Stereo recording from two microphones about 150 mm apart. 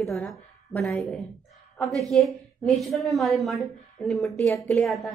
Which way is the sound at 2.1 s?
Centre (ahead or behind).